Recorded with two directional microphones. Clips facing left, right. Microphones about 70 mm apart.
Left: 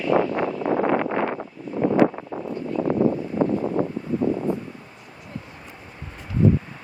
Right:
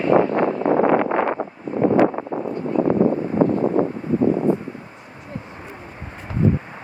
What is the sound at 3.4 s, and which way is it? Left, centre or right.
Vehicle, right.